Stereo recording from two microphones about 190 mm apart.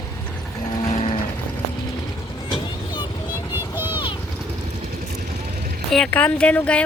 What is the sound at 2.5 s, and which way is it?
Vehicle, 25° left (ahead or behind).